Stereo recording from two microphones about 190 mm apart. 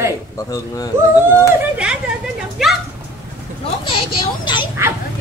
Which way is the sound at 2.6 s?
Centre (ahead or behind).